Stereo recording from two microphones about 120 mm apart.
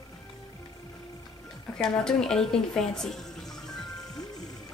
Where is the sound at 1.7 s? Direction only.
5° left (ahead or behind).